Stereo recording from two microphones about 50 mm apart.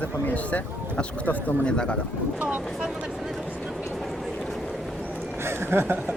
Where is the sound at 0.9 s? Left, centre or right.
Left.